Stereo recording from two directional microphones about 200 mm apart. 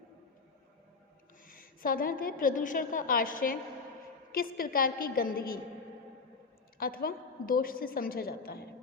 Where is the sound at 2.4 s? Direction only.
40° left (ahead or behind).